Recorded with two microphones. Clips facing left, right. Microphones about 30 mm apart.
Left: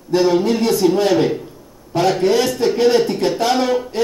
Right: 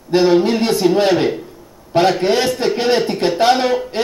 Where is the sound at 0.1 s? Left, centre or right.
Right.